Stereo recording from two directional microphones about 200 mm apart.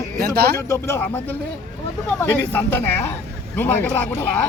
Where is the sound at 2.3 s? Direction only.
10° left (ahead or behind).